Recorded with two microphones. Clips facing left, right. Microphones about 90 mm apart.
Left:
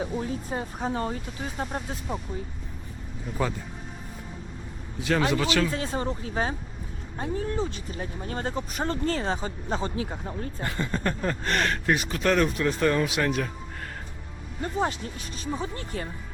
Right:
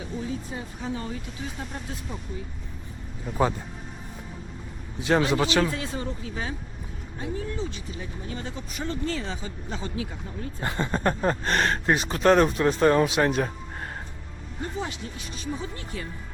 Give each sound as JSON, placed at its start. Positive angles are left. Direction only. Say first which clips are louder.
{"t": 0.0, "sound": "speech", "louder": "left 2 dB", "side_deg": 45}
{"t": 3.3, "sound": "speech", "louder": "right 3 dB", "side_deg": 0}
{"t": 4.9, "sound": "a man's voice", "louder": "right 2 dB", "side_deg": -25}
{"t": 5.7, "sound": "speech", "louder": "left 3 dB", "side_deg": 40}
{"t": 10.6, "sound": "speech", "louder": "right 4 dB", "side_deg": -30}
{"t": 15.5, "sound": "speech", "louder": "left 3 dB", "side_deg": 40}